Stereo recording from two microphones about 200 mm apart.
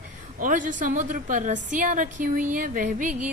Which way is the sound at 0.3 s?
40° right (ahead or behind).